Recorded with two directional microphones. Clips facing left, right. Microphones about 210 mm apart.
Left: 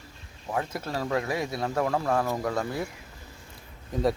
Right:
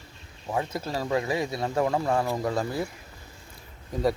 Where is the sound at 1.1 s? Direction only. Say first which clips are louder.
Right 2 dB; 20° right (ahead or behind).